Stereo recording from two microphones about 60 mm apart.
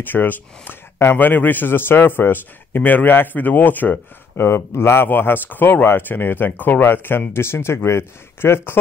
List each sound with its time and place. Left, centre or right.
0.0 s speech: left
4.5 s speech: left